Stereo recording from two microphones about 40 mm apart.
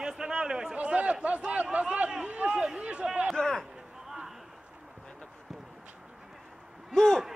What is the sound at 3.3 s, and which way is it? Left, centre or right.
Speech, centre.